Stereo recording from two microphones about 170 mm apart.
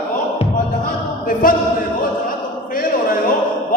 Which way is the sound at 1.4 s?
55° left (ahead or behind).